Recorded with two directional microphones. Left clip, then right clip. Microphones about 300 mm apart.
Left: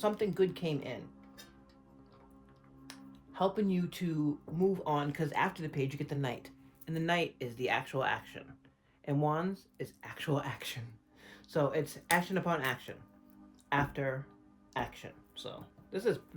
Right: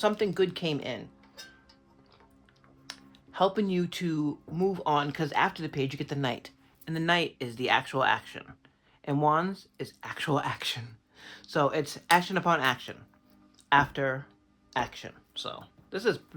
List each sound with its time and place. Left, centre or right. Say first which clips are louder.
0.0 s speech: right 5 dB; centre
2.8 s finger snapping: right 6 dB; centre
4.5 s speech: right 6 dB; centre